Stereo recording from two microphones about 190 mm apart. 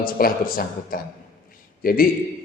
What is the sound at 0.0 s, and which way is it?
A man's voice, 50° left (ahead or behind).